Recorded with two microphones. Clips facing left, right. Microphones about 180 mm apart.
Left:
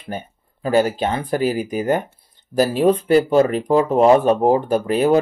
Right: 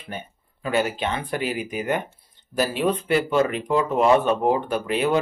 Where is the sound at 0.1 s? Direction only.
35° left (ahead or behind).